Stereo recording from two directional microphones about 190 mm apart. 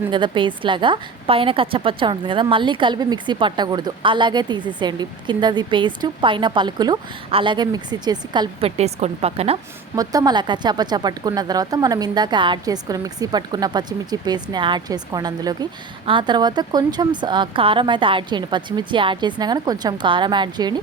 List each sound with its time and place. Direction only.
0.1 s speech: 25° right (ahead or behind)
9.9 s speech: 20° right (ahead or behind)